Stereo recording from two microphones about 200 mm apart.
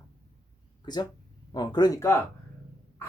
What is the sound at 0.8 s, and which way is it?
Speech, 20° left (ahead or behind).